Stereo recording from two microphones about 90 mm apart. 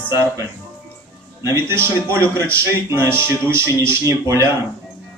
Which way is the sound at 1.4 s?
30° right (ahead or behind).